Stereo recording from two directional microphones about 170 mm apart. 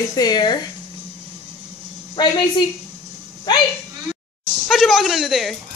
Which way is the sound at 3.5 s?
25° left (ahead or behind).